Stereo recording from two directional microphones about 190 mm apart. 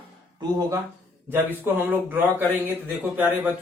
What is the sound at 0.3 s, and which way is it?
Speech, 20° right (ahead or behind).